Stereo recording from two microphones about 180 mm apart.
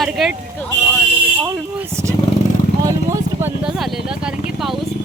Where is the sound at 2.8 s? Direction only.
15° right (ahead or behind).